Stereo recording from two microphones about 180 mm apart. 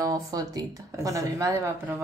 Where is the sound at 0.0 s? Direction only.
20° right (ahead or behind).